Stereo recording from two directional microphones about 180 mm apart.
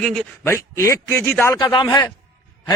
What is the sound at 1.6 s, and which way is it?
Speech, 25° left (ahead or behind).